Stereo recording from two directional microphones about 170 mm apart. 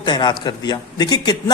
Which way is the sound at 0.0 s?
25° left (ahead or behind).